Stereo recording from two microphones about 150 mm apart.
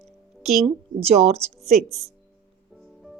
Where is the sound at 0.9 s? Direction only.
45° right (ahead or behind).